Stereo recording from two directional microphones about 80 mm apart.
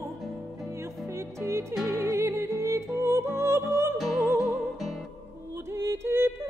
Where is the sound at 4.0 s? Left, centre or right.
Centre.